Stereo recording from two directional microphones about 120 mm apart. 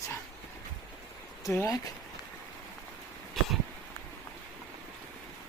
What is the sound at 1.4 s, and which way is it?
Speech, 25° left (ahead or behind).